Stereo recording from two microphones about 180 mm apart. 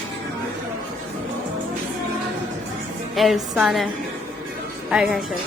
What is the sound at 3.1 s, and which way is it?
Speech, centre (ahead or behind).